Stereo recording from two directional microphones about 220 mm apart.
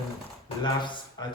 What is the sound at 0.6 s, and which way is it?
Speech, 20° left (ahead or behind).